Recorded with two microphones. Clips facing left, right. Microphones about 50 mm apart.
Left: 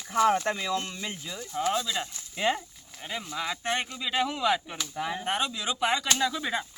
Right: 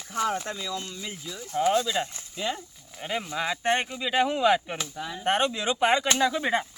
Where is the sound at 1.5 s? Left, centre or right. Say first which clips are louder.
Right 5 dB; centre.